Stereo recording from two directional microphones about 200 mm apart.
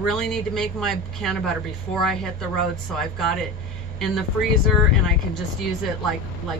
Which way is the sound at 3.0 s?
Centre (ahead or behind).